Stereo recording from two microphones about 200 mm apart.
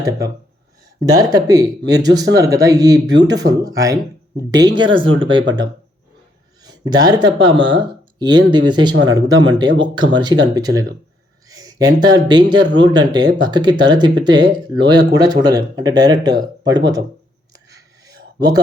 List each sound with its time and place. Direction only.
1.0 s speech: 20° right (ahead or behind)
6.6 s a man's voice: 20° right (ahead or behind)
17.7 s a sound: 20° right (ahead or behind)